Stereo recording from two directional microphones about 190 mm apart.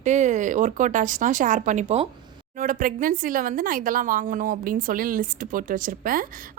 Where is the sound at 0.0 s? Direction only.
40° right (ahead or behind).